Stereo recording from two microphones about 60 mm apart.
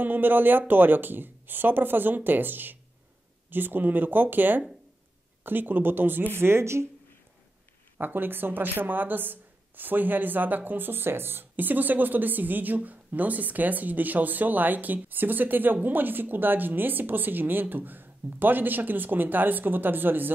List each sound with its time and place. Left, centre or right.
0.0 s speech: right
8.0 s speech: right